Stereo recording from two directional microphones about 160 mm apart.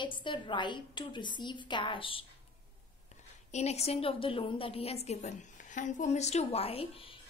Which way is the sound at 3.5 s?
45° left (ahead or behind).